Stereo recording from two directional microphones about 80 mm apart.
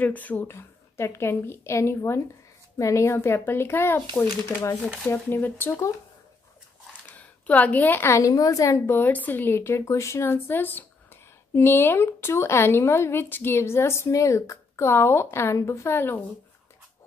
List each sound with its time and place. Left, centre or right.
0.0 s a woman's voice: centre
0.6 s speech: left
5.0 s a woman's voice: left
7.2 s a woman's voice: centre; by 8.3 s left
8.3 s a woman's voice: left